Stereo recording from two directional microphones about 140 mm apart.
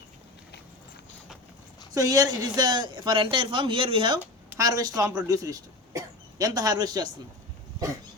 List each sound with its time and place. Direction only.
1.9 s speech: 25° right (ahead or behind)
4.4 s speech: 25° right (ahead or behind)